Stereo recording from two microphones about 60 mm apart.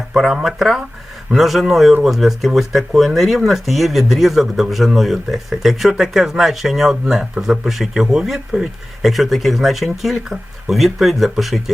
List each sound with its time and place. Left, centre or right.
0.1 s speech: centre